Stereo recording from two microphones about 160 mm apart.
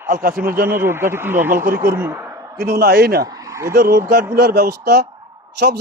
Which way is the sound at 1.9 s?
15° right (ahead or behind).